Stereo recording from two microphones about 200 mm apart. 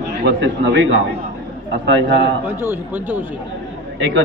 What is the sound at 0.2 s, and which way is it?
A man's voice, 60° right (ahead or behind).